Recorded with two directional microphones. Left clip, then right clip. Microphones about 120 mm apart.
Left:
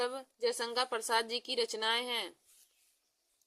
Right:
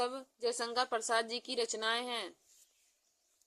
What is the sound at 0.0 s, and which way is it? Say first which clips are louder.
Speech: left 1 dB; 15° left (ahead or behind).